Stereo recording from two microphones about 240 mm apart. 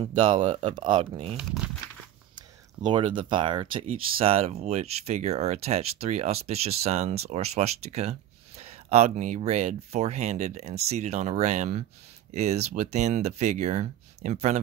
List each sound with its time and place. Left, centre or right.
0.0 s speech: right
2.8 s speech: right